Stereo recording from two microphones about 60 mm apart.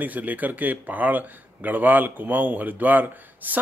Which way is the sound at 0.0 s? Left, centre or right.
Right.